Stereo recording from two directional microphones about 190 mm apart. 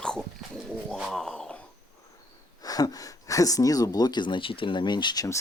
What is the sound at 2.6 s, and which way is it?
Speech, 20° left (ahead or behind).